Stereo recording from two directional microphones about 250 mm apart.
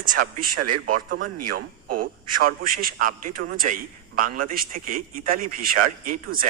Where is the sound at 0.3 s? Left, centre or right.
Right.